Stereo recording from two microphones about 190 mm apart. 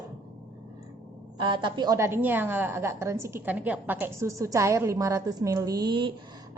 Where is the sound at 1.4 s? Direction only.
25° right (ahead or behind).